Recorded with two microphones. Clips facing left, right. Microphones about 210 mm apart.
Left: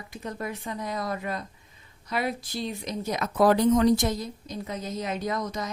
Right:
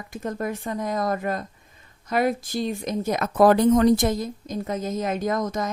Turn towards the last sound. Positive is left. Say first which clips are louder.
# right 5 dB
turn(degrees=-50)  # may be behind; listen again after turning